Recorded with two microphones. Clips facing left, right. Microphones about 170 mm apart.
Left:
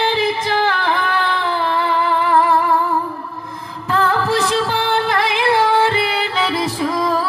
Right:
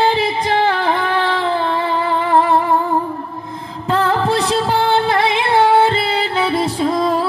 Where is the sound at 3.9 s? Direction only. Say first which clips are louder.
Right 1 dB; 25° right (ahead or behind).